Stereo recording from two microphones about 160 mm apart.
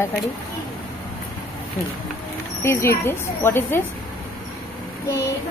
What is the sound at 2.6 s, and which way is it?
Speech, 15° left (ahead or behind).